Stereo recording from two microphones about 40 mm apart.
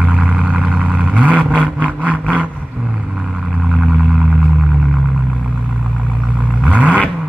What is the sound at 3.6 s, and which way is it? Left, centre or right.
Vehicle, right.